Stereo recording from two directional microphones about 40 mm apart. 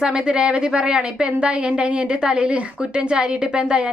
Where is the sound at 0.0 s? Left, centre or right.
Centre.